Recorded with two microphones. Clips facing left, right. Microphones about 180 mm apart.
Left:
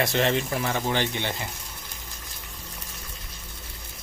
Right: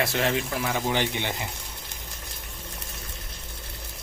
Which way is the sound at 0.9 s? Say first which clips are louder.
Even; 15° right (ahead or behind).